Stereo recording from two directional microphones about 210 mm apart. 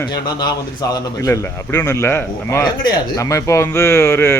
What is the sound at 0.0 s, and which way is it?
A man's voice, 20° left (ahead or behind).